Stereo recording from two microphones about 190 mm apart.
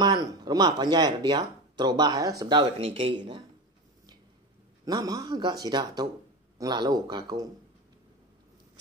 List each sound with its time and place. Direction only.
0.0 s speech: 20° right (ahead or behind)
4.8 s speech: 20° right (ahead or behind)